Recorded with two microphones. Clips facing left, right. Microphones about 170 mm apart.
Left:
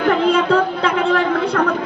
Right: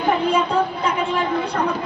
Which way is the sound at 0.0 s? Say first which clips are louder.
Left 4 dB; 90° left.